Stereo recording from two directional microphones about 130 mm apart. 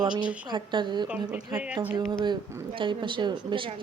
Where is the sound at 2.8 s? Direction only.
40° right (ahead or behind).